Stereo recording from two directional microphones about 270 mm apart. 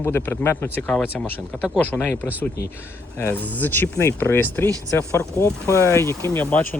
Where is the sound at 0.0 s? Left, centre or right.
Centre.